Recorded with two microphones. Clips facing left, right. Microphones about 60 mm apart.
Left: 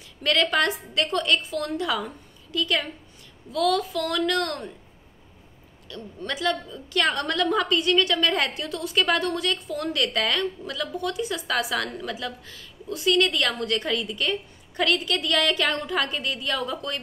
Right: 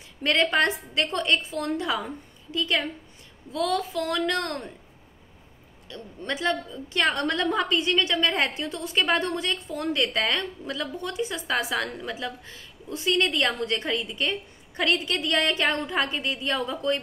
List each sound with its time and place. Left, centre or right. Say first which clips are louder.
0.2 s a woman's voice: even; right
5.9 s a woman's voice: even; right